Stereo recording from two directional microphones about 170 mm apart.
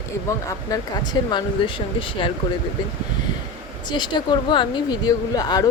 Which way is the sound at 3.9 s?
25° left (ahead or behind).